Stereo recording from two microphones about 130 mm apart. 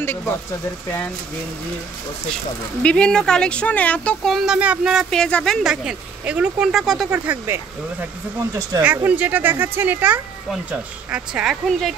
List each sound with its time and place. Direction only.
2.8 s speech: 10° left (ahead or behind); by 5.0 s 10° right (ahead or behind)
5.1 s speech: 5° left (ahead or behind)
7.1 s speech: 15° right (ahead or behind)
8.8 s speech: 15° right (ahead or behind)